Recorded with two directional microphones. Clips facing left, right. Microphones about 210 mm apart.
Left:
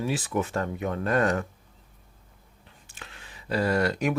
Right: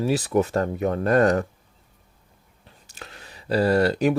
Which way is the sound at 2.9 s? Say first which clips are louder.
Right 5 dB; 40° right (ahead or behind).